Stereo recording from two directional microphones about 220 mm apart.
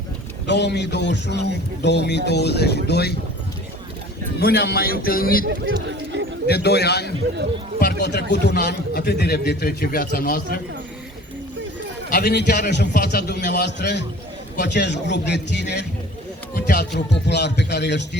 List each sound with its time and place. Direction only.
0.4 s a man's voice: 50° left (ahead or behind)
4.4 s a man's voice: 45° left (ahead or behind)
5.5 s speech: 55° right (ahead or behind)
6.5 s a man's voice: 50° left (ahead or behind)
12.1 s a man's voice: 50° left (ahead or behind)